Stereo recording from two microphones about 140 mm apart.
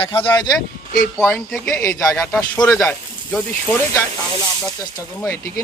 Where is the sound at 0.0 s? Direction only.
40° left (ahead or behind).